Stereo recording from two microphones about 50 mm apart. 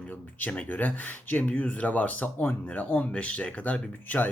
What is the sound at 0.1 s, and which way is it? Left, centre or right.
Speech, left.